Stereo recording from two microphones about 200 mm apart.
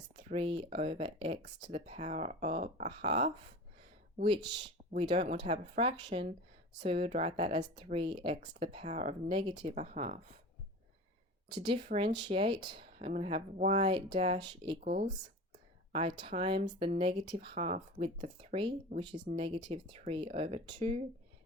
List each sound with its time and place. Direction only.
0.2 s speech: 35° right (ahead or behind)
4.9 s speech: 30° right (ahead or behind)
11.6 s speech: 30° right (ahead or behind)
14.8 s speech: 40° right (ahead or behind)
15.9 s speech: 30° right (ahead or behind)
18.9 s speech: 50° right (ahead or behind)
19.4 s speech: 30° right (ahead or behind)